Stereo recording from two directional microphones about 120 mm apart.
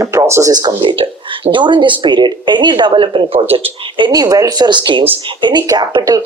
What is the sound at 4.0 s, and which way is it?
Speech, 35° right (ahead or behind).